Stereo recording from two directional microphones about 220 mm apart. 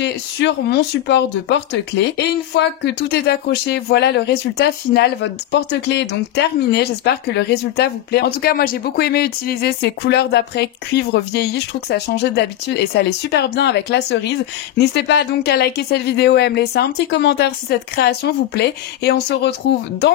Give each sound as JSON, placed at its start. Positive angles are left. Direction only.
{"t": 0.0, "sound": "speech", "side_deg": 50}